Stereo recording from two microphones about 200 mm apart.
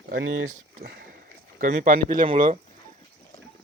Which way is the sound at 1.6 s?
40° right (ahead or behind).